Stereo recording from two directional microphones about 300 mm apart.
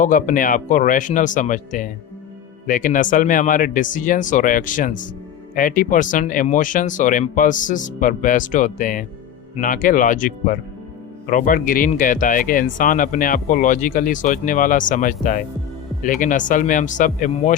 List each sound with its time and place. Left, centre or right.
0.0 s speech: left